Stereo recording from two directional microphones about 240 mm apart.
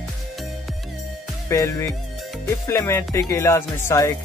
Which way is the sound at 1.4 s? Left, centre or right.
Centre.